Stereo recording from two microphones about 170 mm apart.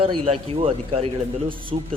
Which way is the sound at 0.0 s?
35° right (ahead or behind).